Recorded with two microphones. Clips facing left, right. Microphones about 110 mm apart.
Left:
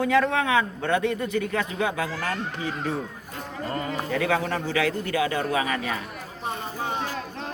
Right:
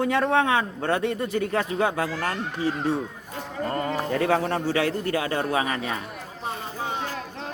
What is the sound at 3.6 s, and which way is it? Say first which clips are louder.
A man's voice: right 3 dB; 35° right (ahead or behind).